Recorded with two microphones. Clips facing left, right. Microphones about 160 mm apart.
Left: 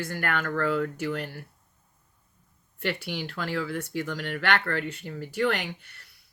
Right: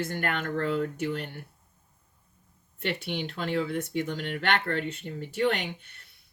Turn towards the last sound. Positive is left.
turn(degrees=-25)  # may be behind; listen again after turning